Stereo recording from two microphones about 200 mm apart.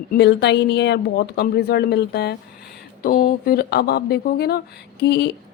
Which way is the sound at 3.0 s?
45° left (ahead or behind).